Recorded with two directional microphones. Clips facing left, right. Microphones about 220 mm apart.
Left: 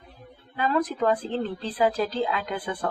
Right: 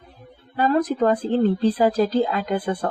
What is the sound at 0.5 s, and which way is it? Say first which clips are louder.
Speech: right 5 dB; 40° right (ahead or behind).